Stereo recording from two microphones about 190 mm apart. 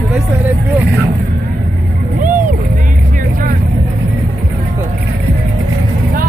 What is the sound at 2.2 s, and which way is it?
Vehicle, 45° right (ahead or behind).